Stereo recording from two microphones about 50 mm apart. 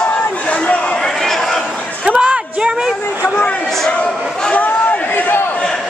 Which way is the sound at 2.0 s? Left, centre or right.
Centre.